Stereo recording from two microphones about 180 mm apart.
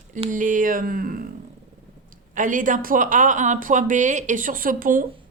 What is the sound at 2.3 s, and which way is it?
Speech, 45° right (ahead or behind).